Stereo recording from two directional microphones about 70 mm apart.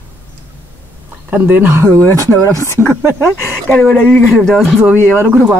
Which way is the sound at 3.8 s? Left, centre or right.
Centre.